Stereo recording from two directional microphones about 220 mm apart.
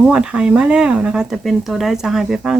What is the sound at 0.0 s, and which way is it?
Speech, 5° right (ahead or behind).